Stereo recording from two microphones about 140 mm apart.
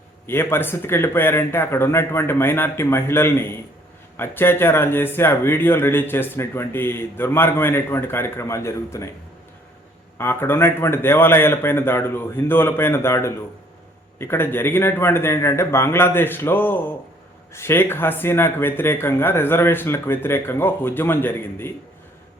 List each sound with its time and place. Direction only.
0.3 s speech: 15° left (ahead or behind)
10.2 s speech: 15° left (ahead or behind)